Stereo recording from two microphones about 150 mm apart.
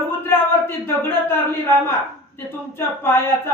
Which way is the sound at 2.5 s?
15° left (ahead or behind).